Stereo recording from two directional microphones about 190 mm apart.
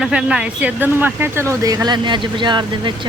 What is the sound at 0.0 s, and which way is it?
Speech, 5° right (ahead or behind).